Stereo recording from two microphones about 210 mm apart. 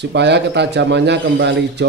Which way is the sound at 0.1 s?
55° right (ahead or behind).